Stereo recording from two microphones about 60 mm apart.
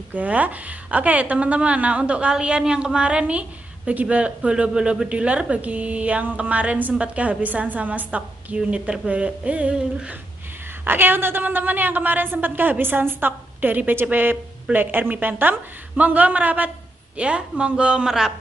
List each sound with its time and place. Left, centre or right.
0.1 s a woman's voice: right
10.9 s a woman's voice: right; by 18.3 s centre